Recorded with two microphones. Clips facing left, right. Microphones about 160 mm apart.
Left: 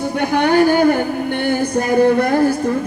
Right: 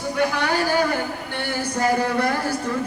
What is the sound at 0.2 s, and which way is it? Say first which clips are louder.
Speech: left 8 dB; 60° left (ahead or behind).